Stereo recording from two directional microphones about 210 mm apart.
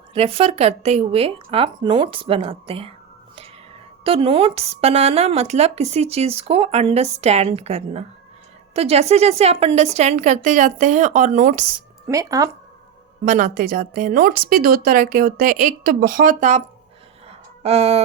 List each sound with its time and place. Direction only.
0.1 s speech: 30° right (ahead or behind)
4.0 s a woman's voice: 25° right (ahead or behind)
12.0 s speech: 15° right (ahead or behind)
13.2 s a woman's voice: 40° right (ahead or behind)
17.2 s a sound: 30° right (ahead or behind)